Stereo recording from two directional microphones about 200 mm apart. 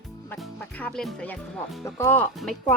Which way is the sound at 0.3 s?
5° left (ahead or behind).